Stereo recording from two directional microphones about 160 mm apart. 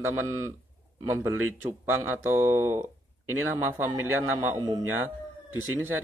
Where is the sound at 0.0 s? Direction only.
15° right (ahead or behind).